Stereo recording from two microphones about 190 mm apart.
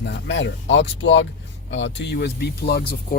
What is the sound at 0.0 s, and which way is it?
Speech, 65° left (ahead or behind).